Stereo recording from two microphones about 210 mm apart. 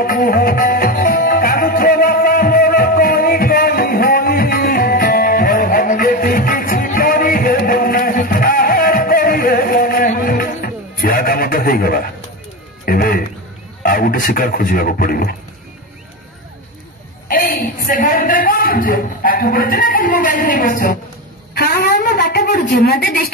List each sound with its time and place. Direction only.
0.0 s music: 40° left (ahead or behind)
13.8 s speech: 45° left (ahead or behind)
17.3 s a sound: 45° left (ahead or behind)